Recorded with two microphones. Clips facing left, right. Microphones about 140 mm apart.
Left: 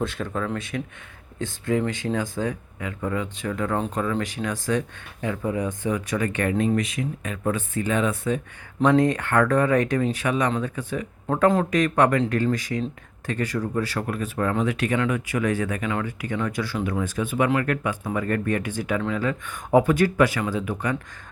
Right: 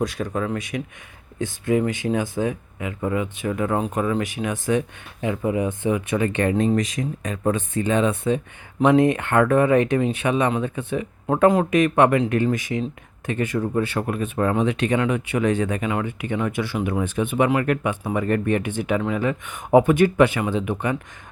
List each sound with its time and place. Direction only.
0.0 s speech: 15° right (ahead or behind)
1.9 s speech: 20° right (ahead or behind)
6.7 s speech: 40° right (ahead or behind); by 21.0 s 20° right (ahead or behind)